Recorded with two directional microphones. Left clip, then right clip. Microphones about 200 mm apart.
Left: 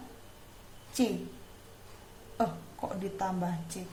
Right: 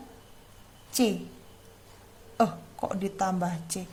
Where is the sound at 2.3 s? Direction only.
40° right (ahead or behind).